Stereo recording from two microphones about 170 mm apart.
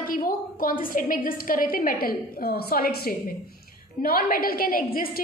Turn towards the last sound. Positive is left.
turn(degrees=60)  # may be behind; listen again after turning